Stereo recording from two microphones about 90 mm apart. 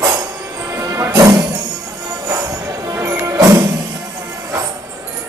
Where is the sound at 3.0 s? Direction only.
35° right (ahead or behind).